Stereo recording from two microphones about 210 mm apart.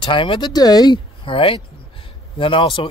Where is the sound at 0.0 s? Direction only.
25° left (ahead or behind).